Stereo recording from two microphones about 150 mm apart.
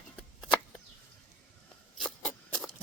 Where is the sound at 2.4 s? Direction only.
5° left (ahead or behind).